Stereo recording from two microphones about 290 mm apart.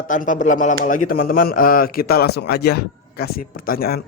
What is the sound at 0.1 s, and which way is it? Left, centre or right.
A man's voice, left.